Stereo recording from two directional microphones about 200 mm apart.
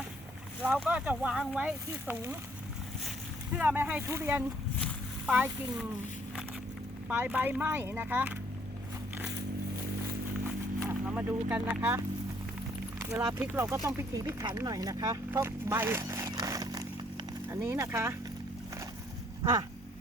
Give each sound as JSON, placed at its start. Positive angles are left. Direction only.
{"t": 0.6, "sound": "speech", "side_deg": -5}
{"t": 3.5, "sound": "speech", "side_deg": -10}
{"t": 4.8, "sound": "a sound", "side_deg": -5}
{"t": 7.1, "sound": "speech", "side_deg": -10}
{"t": 10.4, "sound": "vehicle", "side_deg": -10}
{"t": 13.1, "sound": "speech", "side_deg": -10}